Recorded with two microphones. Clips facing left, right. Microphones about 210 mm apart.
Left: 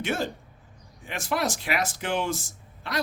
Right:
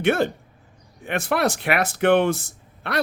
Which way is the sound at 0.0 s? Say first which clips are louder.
Right 8 dB; 60° right (ahead or behind).